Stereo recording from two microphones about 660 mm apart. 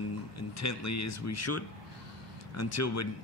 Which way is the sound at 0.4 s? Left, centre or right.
Left.